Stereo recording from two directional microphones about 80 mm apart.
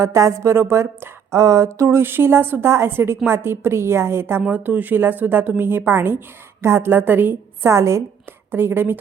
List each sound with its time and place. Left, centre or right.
0.0 s a woman's voice: right